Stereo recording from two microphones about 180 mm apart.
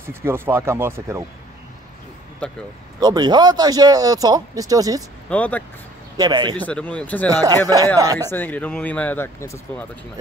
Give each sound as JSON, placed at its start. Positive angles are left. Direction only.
{"t": 0.1, "sound": "speech", "side_deg": -15}
{"t": 2.4, "sound": "speech", "side_deg": 5}
{"t": 3.0, "sound": "speech", "side_deg": -25}
{"t": 5.3, "sound": "speech", "side_deg": 10}
{"t": 6.1, "sound": "speech", "side_deg": -20}
{"t": 6.5, "sound": "speech", "side_deg": 10}
{"t": 7.2, "sound": "speech", "side_deg": -20}
{"t": 8.3, "sound": "speech", "side_deg": 10}